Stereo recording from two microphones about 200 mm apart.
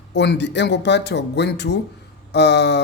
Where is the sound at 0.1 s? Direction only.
60° left (ahead or behind).